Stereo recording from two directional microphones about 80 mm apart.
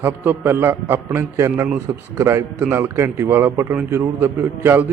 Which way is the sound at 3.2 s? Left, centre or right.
Right.